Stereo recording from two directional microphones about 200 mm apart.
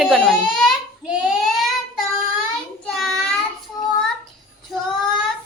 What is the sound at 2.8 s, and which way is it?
Child singing, 5° left (ahead or behind).